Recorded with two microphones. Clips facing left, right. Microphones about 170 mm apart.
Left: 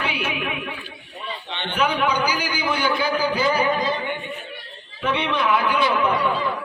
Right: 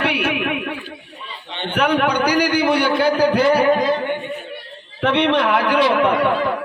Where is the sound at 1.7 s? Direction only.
60° right (ahead or behind).